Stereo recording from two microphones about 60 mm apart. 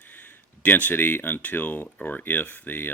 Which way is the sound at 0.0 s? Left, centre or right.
Left.